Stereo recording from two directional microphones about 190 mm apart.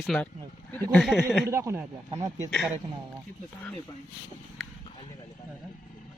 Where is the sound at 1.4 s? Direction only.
15° right (ahead or behind).